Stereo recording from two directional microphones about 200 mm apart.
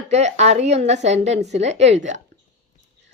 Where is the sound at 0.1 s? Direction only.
35° right (ahead or behind).